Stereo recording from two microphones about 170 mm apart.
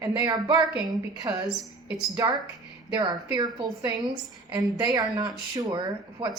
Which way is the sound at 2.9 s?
25° right (ahead or behind).